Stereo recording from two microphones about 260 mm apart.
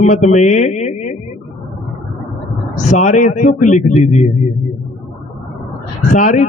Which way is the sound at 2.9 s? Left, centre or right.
Left.